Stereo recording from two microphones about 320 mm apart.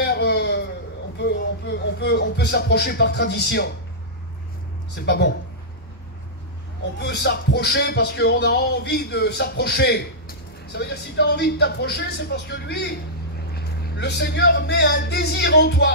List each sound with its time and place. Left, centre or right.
0.0 s a sound: left
1.1 s speech: left
5.0 s music: left
7.0 s music: left